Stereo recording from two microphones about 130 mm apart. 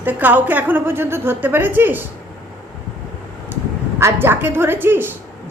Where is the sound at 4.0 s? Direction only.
15° right (ahead or behind).